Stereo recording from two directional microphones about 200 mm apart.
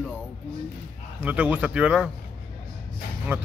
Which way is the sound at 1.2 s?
10° right (ahead or behind).